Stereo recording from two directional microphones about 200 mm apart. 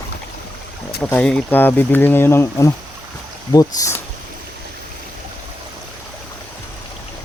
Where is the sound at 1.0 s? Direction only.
10° left (ahead or behind).